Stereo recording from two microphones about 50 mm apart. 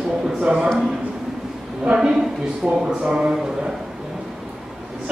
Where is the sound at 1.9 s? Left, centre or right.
Centre.